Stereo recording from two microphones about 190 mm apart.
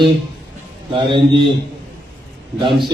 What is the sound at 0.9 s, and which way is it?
Speech, 25° right (ahead or behind).